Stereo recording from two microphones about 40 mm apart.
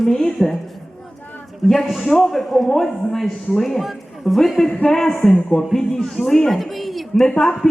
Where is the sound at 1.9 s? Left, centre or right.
Centre.